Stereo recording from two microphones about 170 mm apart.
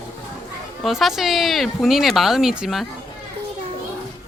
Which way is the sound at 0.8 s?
Centre (ahead or behind).